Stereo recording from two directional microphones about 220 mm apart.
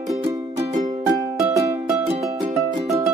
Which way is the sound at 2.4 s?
15° right (ahead or behind).